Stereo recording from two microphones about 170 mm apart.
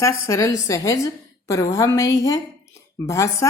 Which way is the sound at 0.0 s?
20° left (ahead or behind).